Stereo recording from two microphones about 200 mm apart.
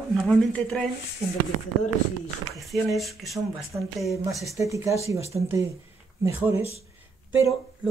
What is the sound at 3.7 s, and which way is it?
Speech, 15° right (ahead or behind).